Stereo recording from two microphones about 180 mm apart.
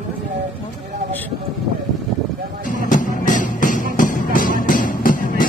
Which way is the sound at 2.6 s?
45° left (ahead or behind).